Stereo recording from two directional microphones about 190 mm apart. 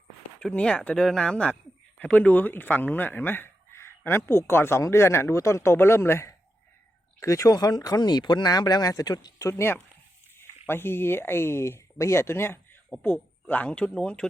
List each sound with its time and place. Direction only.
0.3 s speech: 5° left (ahead or behind)